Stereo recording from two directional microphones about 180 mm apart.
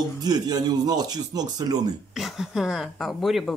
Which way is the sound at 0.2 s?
20° right (ahead or behind).